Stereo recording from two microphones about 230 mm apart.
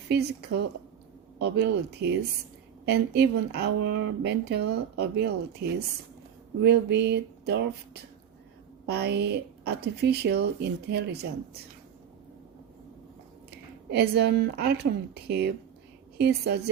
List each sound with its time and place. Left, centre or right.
0.1 s speech: right
8.9 s speech: right
13.9 s speech: right